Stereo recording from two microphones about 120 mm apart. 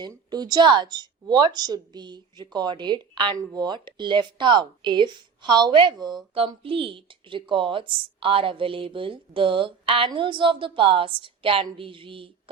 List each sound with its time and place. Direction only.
0.1 s speech: 35° right (ahead or behind)
6.5 s a woman's voice: 45° right (ahead or behind)